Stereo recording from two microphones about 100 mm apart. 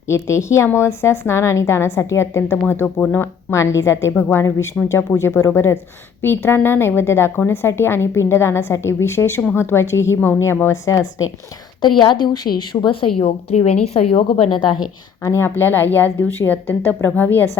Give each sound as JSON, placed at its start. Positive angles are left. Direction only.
{"t": 0.1, "sound": "a woman's voice", "side_deg": 30}
{"t": 3.5, "sound": "a woman's voice", "side_deg": 30}
{"t": 11.9, "sound": "a woman's voice", "side_deg": 50}
{"t": 12.8, "sound": "a woman's voice", "side_deg": 65}
{"t": 13.1, "sound": "speech", "side_deg": 80}
{"t": 15.2, "sound": "a woman's voice", "side_deg": 25}